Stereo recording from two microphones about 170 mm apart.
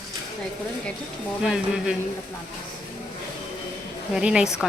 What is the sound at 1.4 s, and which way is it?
Speech, 5° right (ahead or behind).